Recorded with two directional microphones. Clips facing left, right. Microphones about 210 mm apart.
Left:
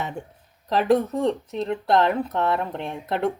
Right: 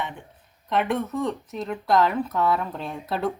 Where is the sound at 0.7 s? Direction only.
35° left (ahead or behind); by 3.3 s 20° left (ahead or behind).